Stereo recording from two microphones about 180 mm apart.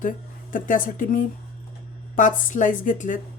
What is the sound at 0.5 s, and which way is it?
Speech, 50° left (ahead or behind).